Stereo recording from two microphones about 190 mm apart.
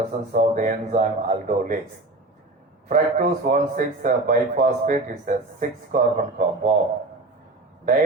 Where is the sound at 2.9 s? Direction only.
45° right (ahead or behind).